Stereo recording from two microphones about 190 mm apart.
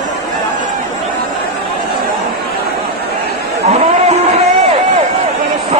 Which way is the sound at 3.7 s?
35° right (ahead or behind).